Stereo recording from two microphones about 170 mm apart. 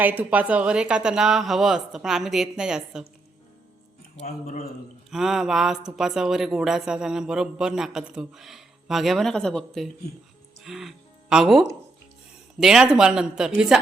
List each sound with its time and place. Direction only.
0.0 s speech: 10° right (ahead or behind)
4.2 s a man's voice: 40° left (ahead or behind)
5.1 s speech: centre (ahead or behind)